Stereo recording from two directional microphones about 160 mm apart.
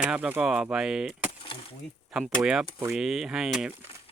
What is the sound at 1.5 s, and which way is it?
Speech, 30° left (ahead or behind).